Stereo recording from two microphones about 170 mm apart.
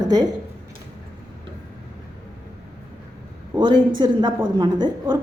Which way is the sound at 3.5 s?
25° right (ahead or behind).